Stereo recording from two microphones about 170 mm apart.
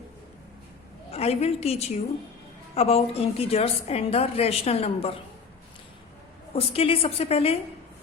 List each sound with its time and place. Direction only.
1.1 s a woman's voice: 35° left (ahead or behind)
6.5 s a woman's voice: 35° left (ahead or behind)